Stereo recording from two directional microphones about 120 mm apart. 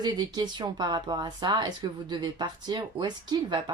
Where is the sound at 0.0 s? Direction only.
35° right (ahead or behind).